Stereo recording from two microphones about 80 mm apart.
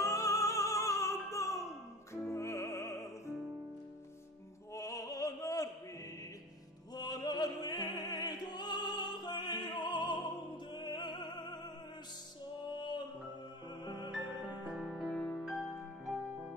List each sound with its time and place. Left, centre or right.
0.0 s opera: left
2.2 s music: left
4.7 s opera: left
7.0 s opera: left
10.7 s music: left
12.7 s music: left
13.8 s music: left
14.7 s music: centre